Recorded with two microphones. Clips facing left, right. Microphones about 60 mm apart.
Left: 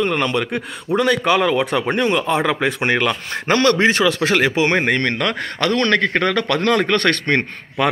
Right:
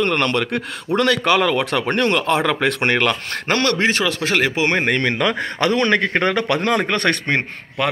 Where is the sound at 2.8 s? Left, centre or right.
Right.